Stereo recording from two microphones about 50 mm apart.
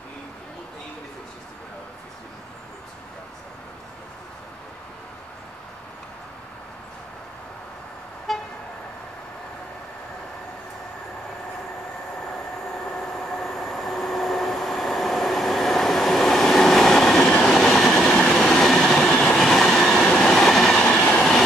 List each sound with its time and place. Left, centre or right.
8.3 s vehicle: centre
12.7 s train: centre
20.8 s train: centre